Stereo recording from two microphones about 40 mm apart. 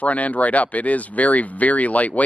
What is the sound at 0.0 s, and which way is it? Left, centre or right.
Speech, left.